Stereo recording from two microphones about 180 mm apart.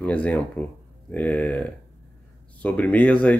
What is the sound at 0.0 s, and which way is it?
Speech, 5° left (ahead or behind).